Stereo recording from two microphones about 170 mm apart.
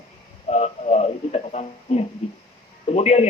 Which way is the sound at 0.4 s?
40° left (ahead or behind).